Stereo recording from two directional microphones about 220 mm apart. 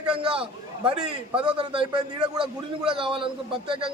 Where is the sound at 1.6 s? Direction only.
20° right (ahead or behind).